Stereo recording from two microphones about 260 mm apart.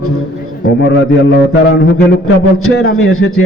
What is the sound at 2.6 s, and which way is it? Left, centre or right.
Speech, left.